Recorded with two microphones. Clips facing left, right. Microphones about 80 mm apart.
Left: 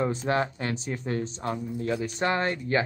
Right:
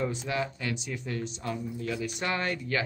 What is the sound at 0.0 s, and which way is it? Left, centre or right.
Speech, left.